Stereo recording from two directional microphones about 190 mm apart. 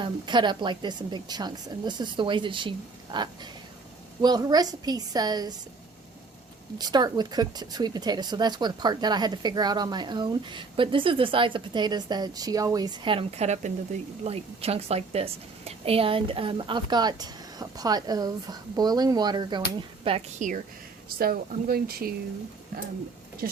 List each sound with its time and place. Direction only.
0.0 s speech: 25° right (ahead or behind)
6.7 s a woman's voice: 20° right (ahead or behind)
21.2 s speech: 50° right (ahead or behind)
23.4 s speech: 50° right (ahead or behind)